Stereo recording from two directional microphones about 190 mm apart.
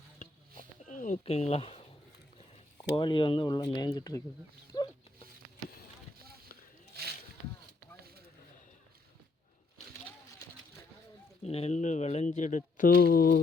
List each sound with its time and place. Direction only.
0.2 s a sound: 45° left (ahead or behind)
1.2 s speech: 35° left (ahead or behind)
4.7 s dog: 20° left (ahead or behind)
7.0 s rowboat: 55° right (ahead or behind)
11.4 s speech: 35° left (ahead or behind); by 13.4 s 55° left (ahead or behind)